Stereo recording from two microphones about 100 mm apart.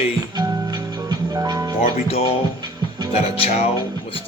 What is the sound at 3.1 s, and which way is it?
Speech, 90° left.